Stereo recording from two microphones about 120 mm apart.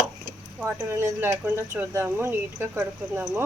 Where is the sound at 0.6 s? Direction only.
15° right (ahead or behind).